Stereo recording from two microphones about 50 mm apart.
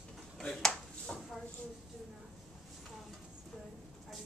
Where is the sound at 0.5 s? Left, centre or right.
Centre.